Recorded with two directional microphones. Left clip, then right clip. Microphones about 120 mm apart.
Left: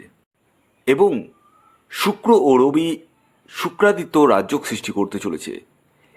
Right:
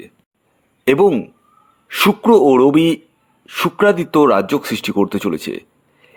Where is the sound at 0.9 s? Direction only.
55° right (ahead or behind).